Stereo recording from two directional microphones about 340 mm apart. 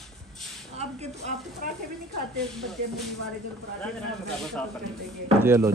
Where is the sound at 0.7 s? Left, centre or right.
Centre.